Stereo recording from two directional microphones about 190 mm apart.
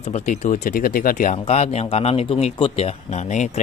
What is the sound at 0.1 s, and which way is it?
Speech, 40° left (ahead or behind).